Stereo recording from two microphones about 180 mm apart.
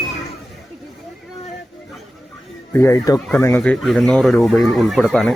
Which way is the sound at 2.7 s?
15° left (ahead or behind).